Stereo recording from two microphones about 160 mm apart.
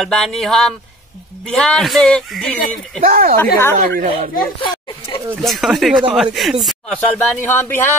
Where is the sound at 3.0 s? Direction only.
65° right (ahead or behind).